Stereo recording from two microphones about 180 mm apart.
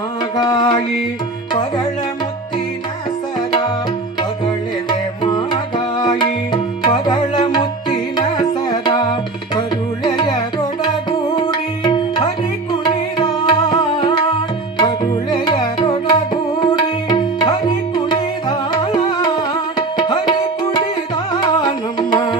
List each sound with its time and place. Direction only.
0.3 s music: 25° left (ahead or behind)
4.9 s music: 25° left (ahead or behind)
11.1 s tabla: 25° left (ahead or behind)
12.8 s music: 25° left (ahead or behind)
21.6 s music: 25° left (ahead or behind)